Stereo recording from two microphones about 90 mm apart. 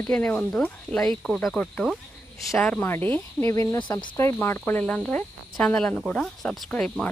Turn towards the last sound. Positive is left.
turn(degrees=10)  # may be behind; listen again after turning